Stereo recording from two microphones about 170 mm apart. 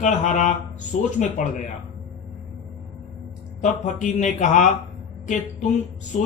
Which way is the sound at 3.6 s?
45° left (ahead or behind).